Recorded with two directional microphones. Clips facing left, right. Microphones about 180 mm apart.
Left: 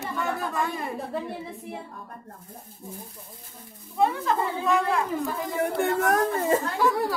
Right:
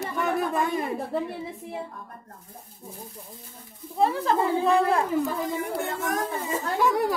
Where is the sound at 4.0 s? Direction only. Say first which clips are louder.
Right 1 dB; 30° right (ahead or behind).